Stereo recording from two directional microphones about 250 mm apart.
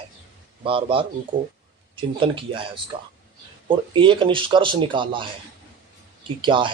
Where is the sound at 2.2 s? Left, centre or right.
Centre.